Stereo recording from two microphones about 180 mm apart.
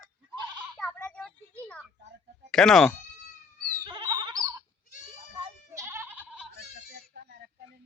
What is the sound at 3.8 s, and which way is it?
Goat, 25° right (ahead or behind).